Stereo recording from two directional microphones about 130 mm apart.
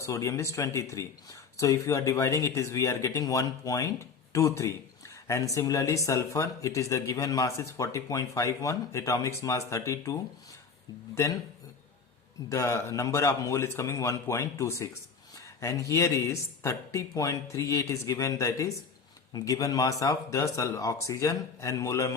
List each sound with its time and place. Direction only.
0.0 s speech: 25° left (ahead or behind)
12.5 s speech: 25° left (ahead or behind)